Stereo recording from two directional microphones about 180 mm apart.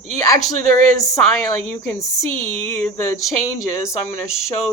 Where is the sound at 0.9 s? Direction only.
20° left (ahead or behind).